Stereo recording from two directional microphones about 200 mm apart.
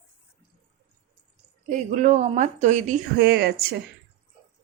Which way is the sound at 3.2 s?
55° right (ahead or behind).